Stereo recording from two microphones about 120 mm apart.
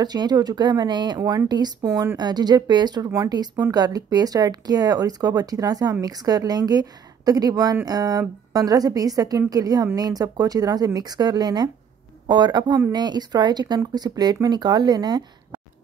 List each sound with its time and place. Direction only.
0.0 s speech: 35° right (ahead or behind)